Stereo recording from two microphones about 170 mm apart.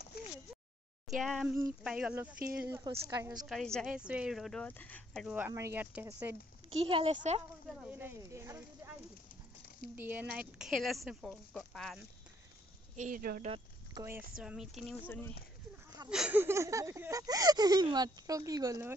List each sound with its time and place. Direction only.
0.1 s a sound: 65° left (ahead or behind)
1.0 s speech: centre (ahead or behind)
3.1 s speech: 20° right (ahead or behind)
3.4 s speech: centre (ahead or behind)
5.5 s speech: 15° right (ahead or behind)
6.7 s speech: 35° right (ahead or behind)
7.8 s speech: 10° right (ahead or behind)
9.9 s speech: 10° right (ahead or behind)
12.9 s speech: 50° right (ahead or behind)
13.9 s speech: 15° right (ahead or behind)
15.0 s speech: 10° left (ahead or behind)
16.1 s speech: 5° right (ahead or behind)